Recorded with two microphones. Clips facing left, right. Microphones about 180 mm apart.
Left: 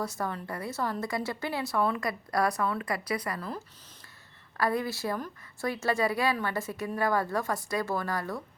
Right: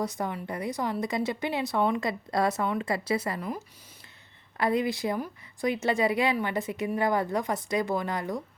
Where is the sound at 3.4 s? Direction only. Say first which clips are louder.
Right 3 dB; 10° right (ahead or behind).